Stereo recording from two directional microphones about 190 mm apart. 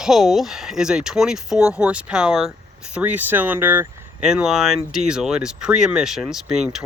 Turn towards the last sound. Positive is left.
turn(degrees=-5)  # may be behind; listen again after turning